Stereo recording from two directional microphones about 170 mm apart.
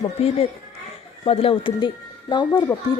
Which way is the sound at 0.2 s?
35° left (ahead or behind).